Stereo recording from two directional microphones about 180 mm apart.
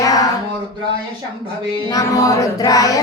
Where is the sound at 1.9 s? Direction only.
20° left (ahead or behind).